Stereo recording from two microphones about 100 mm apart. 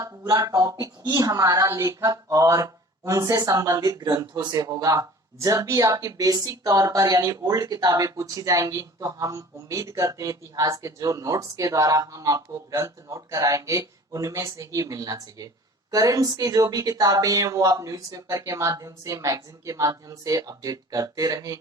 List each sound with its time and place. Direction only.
0.0 s speech: 35° right (ahead or behind)